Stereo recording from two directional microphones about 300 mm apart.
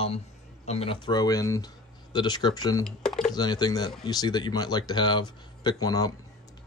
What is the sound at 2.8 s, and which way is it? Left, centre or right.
Computer keyboard, centre.